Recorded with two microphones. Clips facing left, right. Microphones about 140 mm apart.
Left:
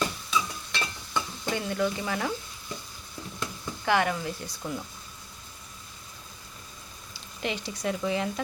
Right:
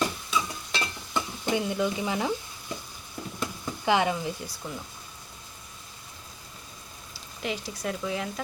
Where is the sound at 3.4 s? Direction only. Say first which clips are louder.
Right 2 dB; 15° right (ahead or behind).